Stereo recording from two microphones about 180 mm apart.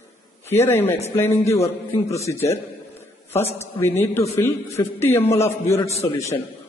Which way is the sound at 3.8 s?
15° left (ahead or behind).